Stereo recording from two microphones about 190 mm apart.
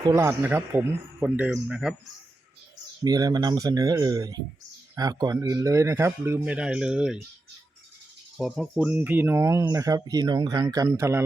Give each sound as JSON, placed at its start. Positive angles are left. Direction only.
{"t": 0.0, "sound": "speech", "side_deg": -15}
{"t": 3.0, "sound": "speech", "side_deg": -20}
{"t": 8.4, "sound": "speech", "side_deg": 0}